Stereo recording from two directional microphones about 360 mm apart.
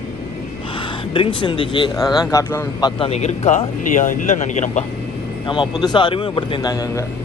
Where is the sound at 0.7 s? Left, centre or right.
Centre.